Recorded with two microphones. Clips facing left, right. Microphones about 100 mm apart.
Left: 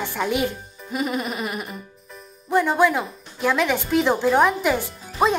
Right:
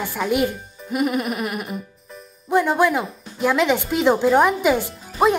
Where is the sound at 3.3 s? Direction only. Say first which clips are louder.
Right 3 dB; 15° right (ahead or behind).